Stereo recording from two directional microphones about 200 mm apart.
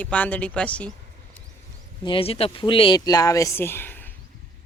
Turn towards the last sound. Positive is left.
turn(degrees=10)  # may be behind; listen again after turning